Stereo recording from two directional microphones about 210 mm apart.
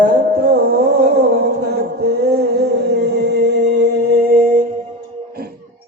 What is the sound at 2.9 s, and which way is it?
Music, 50° right (ahead or behind).